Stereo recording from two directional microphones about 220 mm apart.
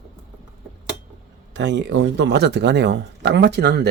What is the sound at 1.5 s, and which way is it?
Speech, 55° right (ahead or behind).